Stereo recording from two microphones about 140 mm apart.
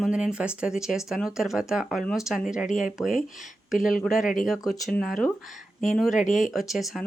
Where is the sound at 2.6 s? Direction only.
65° left (ahead or behind).